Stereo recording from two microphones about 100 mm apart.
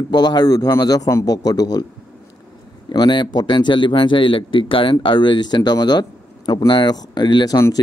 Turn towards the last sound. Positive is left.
turn(degrees=35)  # may be behind; listen again after turning